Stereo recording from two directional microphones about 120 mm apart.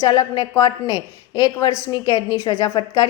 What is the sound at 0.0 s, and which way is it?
A woman's voice, 35° left (ahead or behind).